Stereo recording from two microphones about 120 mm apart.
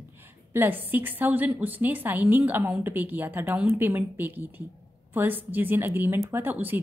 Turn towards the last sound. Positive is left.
turn(degrees=-15)  # may be behind; listen again after turning